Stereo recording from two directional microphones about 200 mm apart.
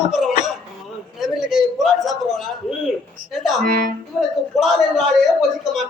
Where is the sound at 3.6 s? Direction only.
45° right (ahead or behind).